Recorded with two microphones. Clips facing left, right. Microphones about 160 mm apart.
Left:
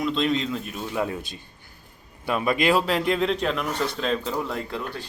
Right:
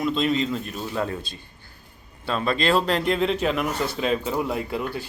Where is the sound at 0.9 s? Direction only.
15° left (ahead or behind).